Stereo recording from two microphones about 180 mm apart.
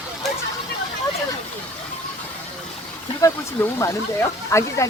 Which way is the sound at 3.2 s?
15° left (ahead or behind).